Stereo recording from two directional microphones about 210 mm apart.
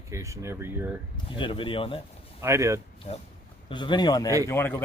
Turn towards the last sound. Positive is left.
turn(degrees=10)  # may be behind; listen again after turning